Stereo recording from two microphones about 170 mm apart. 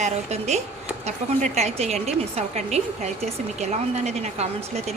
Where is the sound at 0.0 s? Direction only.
40° right (ahead or behind).